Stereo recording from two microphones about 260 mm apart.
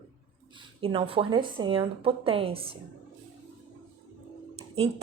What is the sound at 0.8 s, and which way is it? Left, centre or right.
Speech, right.